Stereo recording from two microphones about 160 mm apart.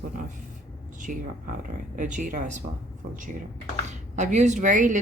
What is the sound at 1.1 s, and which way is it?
Speech, 60° right (ahead or behind).